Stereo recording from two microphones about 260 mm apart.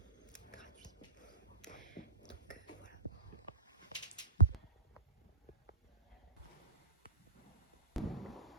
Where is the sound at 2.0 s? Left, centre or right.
Left.